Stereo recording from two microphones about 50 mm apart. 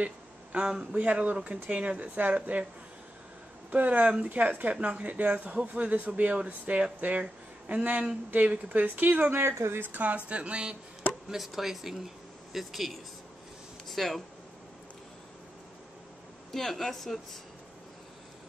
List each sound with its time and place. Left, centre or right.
0.0 s a sound: right
0.9 s speech: right
3.7 s speech: right
9.4 s speech: right
9.8 s speech: right
10.2 s speech: right
11.2 s speech: centre
16.5 s speech: centre